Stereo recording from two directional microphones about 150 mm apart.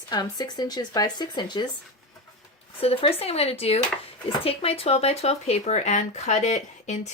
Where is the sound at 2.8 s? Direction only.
40° left (ahead or behind).